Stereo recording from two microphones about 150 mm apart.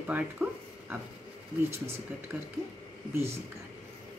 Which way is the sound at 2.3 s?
15° right (ahead or behind).